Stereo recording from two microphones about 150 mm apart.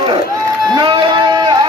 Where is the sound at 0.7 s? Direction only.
30° right (ahead or behind).